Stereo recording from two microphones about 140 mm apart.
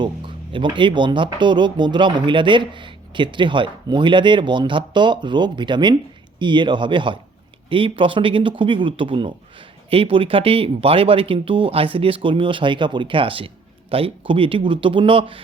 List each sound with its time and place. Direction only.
0.5 s speech: 35° right (ahead or behind)